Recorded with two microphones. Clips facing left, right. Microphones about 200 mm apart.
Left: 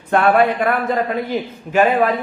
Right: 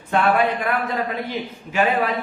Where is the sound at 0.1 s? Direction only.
60° left (ahead or behind).